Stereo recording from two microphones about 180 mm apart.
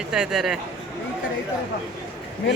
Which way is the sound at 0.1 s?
5° right (ahead or behind).